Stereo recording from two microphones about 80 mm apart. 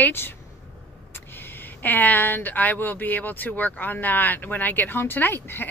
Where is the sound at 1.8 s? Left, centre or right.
Left.